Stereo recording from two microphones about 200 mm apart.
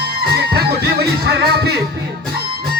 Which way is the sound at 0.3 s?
50° right (ahead or behind).